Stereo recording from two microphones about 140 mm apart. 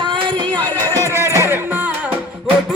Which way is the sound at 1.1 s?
20° right (ahead or behind).